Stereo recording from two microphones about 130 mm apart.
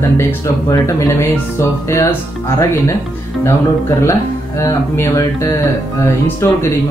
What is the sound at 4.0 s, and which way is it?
Speech, 20° left (ahead or behind).